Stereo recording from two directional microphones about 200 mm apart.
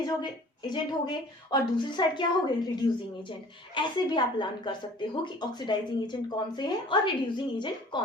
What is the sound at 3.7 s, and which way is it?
A woman's voice, 25° left (ahead or behind).